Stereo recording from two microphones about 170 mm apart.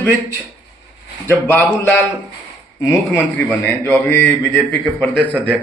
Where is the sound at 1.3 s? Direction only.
10° left (ahead or behind).